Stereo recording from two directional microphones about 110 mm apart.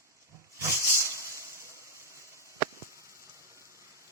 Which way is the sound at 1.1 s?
25° right (ahead or behind).